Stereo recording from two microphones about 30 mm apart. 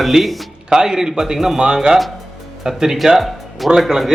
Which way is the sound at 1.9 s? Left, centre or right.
Right.